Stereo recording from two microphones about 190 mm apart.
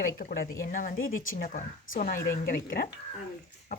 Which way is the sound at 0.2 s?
50° left (ahead or behind).